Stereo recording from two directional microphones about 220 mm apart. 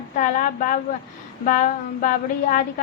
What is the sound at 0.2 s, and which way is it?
A woman's voice, 35° left (ahead or behind).